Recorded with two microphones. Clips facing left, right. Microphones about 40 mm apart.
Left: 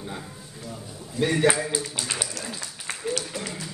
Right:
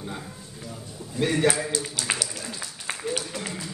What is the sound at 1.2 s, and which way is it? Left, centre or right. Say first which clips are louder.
Speech: left 1 dB; centre.